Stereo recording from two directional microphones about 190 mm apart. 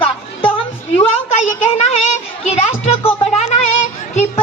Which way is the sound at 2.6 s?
35° left (ahead or behind).